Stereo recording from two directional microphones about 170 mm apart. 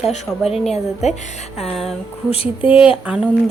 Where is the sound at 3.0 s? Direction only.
5° right (ahead or behind).